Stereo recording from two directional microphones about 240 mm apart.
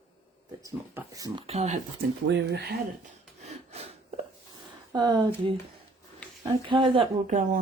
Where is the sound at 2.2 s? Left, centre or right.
Right.